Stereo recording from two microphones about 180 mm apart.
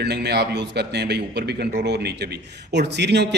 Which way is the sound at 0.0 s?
65° right (ahead or behind).